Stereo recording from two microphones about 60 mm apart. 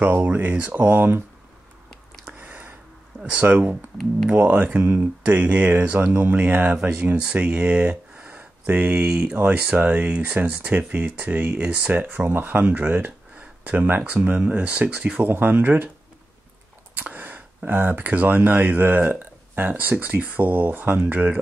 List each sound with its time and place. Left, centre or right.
0.2 s speech: right
0.7 s speech: right
2.3 s a sound: right
3.3 s speech: right
5.2 s speech: right
6.3 s speech: right
16.9 s speech: right